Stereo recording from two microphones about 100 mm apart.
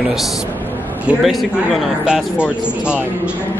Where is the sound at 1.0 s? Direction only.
Centre (ahead or behind).